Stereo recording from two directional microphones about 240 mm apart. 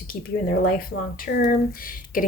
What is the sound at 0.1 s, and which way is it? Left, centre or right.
Speech, left.